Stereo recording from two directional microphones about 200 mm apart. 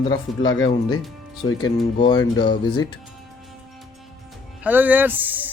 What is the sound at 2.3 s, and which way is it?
Speech, 20° left (ahead or behind).